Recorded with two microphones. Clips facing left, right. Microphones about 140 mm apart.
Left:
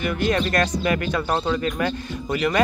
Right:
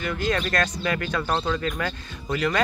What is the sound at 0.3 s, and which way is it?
Speech, 25° left (ahead or behind).